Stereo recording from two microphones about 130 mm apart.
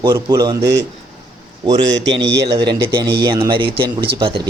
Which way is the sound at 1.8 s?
35° right (ahead or behind).